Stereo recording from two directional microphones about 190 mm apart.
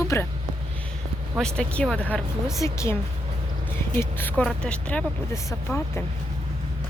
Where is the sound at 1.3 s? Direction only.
5° left (ahead or behind).